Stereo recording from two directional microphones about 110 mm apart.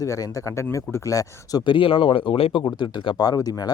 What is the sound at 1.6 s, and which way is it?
Speech, 50° left (ahead or behind).